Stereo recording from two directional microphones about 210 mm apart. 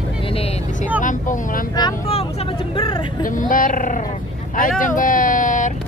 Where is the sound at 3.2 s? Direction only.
40° left (ahead or behind).